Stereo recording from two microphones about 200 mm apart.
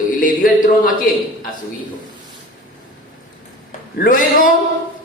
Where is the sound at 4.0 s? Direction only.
45° left (ahead or behind).